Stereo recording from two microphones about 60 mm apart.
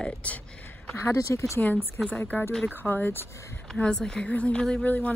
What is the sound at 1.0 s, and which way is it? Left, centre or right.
Speech, left.